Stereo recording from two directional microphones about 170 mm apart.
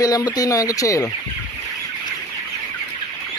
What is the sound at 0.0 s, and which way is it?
Speech, 20° left (ahead or behind).